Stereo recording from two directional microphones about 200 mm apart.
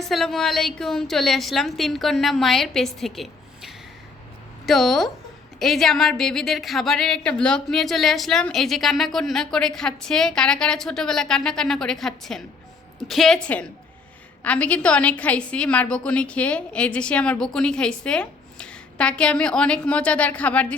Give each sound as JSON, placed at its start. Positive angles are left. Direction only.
{"t": 0.0, "sound": "speech", "side_deg": 0}